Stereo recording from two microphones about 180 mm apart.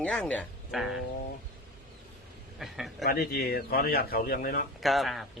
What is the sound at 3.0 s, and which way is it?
A man's voice, 60° left (ahead or behind).